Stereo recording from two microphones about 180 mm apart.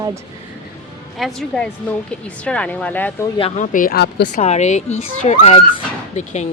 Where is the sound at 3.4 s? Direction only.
40° left (ahead or behind); by 4.2 s 60° left (ahead or behind).